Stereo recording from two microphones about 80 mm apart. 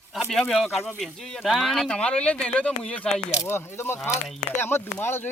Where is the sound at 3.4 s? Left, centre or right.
Left.